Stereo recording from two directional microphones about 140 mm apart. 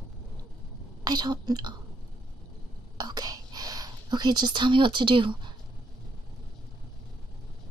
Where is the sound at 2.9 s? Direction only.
30° right (ahead or behind).